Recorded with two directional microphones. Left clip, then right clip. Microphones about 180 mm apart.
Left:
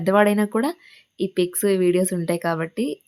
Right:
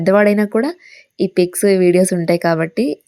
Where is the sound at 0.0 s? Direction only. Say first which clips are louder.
Right 5 dB; 25° right (ahead or behind).